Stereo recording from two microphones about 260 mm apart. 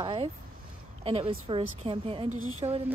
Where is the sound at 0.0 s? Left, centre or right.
Centre.